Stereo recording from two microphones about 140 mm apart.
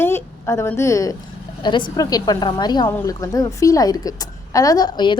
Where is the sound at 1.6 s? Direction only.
35° left (ahead or behind).